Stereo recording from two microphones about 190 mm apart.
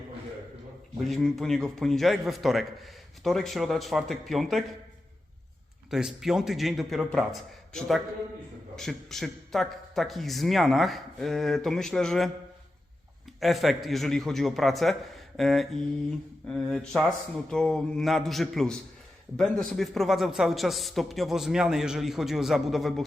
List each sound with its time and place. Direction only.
1.0 s a man's voice: centre (ahead or behind)
5.9 s a man's voice: centre (ahead or behind)
13.4 s a man's voice: centre (ahead or behind)